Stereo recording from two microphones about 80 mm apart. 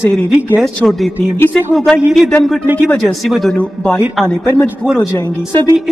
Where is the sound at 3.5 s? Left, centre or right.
Centre.